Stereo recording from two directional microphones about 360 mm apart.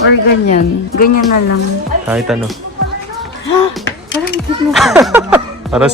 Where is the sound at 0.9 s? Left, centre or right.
Left.